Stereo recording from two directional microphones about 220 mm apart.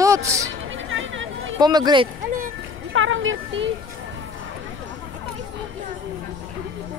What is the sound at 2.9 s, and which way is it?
Speech, 60° right (ahead or behind).